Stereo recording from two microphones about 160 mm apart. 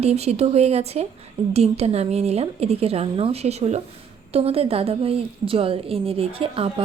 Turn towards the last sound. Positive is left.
turn(degrees=-35)  # may be behind; listen again after turning